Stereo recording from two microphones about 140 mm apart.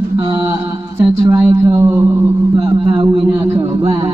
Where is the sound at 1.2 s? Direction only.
15° right (ahead or behind).